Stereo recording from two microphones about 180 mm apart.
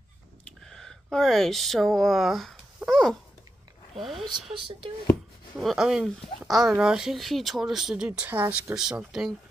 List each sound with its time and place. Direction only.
0.5 s speech: 5° left (ahead or behind)
4.6 s speech: 30° right (ahead or behind)
5.6 s speech: centre (ahead or behind)